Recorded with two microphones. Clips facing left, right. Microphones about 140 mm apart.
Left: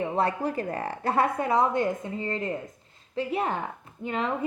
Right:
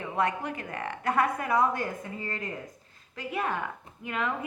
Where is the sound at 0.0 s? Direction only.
30° left (ahead or behind).